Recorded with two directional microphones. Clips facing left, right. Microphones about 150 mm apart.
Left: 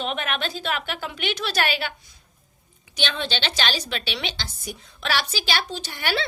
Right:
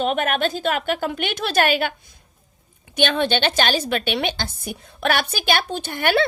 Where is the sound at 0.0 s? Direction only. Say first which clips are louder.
Right 7 dB; 45° right (ahead or behind).